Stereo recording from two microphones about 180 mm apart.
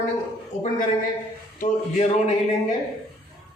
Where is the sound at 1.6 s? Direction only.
40° left (ahead or behind).